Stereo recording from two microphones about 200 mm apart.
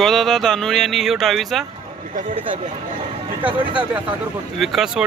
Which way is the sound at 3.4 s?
5° right (ahead or behind).